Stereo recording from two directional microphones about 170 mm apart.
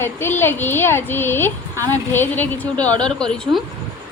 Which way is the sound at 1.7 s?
20° right (ahead or behind).